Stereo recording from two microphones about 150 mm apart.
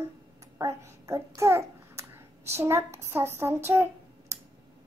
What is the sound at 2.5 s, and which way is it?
Speech, 15° right (ahead or behind).